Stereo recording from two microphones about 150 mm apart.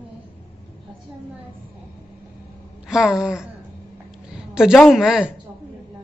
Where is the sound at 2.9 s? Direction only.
5° right (ahead or behind).